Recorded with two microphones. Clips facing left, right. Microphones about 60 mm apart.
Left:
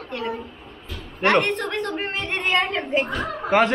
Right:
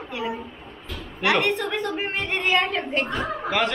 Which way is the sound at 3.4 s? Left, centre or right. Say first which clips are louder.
Left 7 dB; left.